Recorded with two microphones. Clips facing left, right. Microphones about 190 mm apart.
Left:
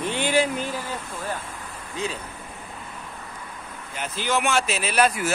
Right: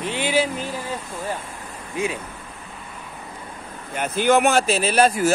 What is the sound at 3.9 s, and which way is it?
Speech, 55° right (ahead or behind).